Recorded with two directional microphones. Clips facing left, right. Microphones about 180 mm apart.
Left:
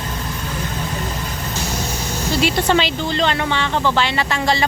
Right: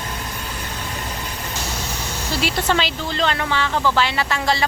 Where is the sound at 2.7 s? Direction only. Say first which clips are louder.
Left 4 dB; centre (ahead or behind).